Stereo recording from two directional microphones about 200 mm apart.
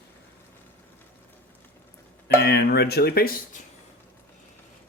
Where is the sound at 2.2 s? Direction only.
55° left (ahead or behind).